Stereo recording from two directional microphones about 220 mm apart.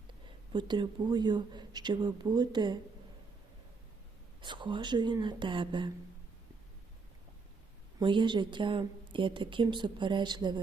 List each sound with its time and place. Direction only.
0.3 s a woman's voice: 20° right (ahead or behind)
4.4 s a woman's voice: 20° right (ahead or behind)
7.9 s a woman's voice: 20° right (ahead or behind)